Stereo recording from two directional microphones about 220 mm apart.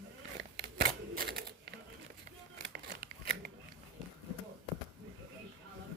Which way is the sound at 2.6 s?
50° right (ahead or behind).